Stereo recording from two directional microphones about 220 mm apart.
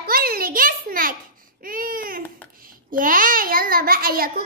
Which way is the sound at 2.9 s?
40° right (ahead or behind).